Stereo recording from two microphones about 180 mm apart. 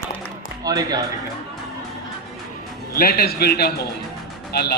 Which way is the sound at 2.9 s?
55° left (ahead or behind).